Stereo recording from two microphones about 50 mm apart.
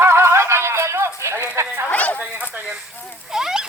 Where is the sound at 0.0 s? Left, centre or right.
Right.